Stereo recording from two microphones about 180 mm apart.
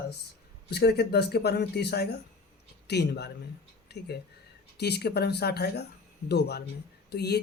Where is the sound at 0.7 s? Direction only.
65° left (ahead or behind).